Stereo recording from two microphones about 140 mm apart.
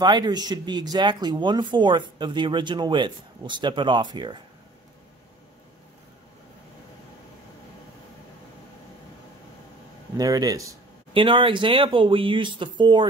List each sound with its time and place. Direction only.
0.0 s speech: 30° right (ahead or behind)
10.1 s speech: 25° right (ahead or behind)
11.1 s speech: 35° right (ahead or behind)